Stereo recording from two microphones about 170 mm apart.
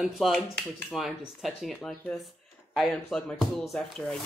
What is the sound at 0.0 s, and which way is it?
Speech, centre (ahead or behind).